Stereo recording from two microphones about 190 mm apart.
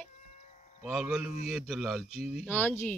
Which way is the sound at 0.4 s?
40° left (ahead or behind).